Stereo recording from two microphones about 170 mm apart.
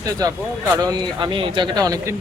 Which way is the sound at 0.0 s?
20° right (ahead or behind).